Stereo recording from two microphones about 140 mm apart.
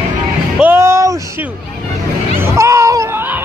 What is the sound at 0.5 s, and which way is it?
Music, 15° right (ahead or behind).